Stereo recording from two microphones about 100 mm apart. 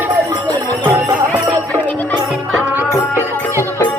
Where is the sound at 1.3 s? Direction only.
15° left (ahead or behind).